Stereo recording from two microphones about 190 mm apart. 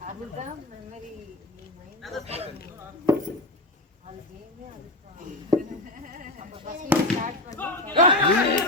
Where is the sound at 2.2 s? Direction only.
35° right (ahead or behind).